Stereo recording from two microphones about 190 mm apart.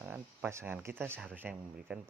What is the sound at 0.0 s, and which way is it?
Speech, 10° right (ahead or behind).